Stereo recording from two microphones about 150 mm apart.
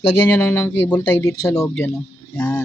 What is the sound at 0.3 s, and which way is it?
Speech, 15° left (ahead or behind).